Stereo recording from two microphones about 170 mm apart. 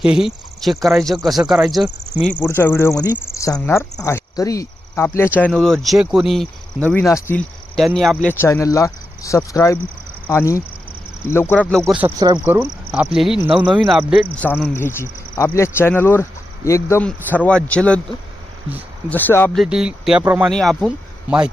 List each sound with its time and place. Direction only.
0.0 s speech: 5° right (ahead or behind)
6.9 s speech: 15° left (ahead or behind)
7.9 s speech: centre (ahead or behind)
8.3 s speech: 15° left (ahead or behind)
11.7 s speech: 5° left (ahead or behind)
12.2 s speech: 25° right (ahead or behind)
13.1 s speech: centre (ahead or behind)
14.3 s speech: 10° left (ahead or behind)
19.0 s speech: 10° left (ahead or behind)
19.5 s speech: 5° right (ahead or behind)